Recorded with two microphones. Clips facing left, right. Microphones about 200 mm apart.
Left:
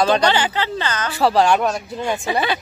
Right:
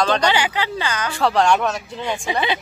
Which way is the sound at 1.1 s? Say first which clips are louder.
Left 2 dB; 5° left (ahead or behind).